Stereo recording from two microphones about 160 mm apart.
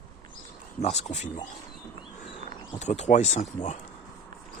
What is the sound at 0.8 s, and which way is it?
Speech, 45° left (ahead or behind).